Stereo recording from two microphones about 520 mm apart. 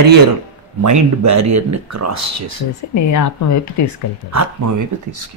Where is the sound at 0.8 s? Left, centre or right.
Right.